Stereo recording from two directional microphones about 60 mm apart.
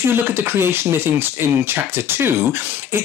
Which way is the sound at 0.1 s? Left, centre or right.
Right.